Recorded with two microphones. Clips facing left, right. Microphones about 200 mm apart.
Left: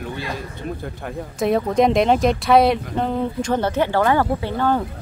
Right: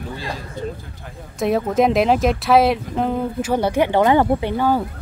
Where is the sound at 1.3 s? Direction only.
Centre (ahead or behind); by 4.7 s 20° right (ahead or behind).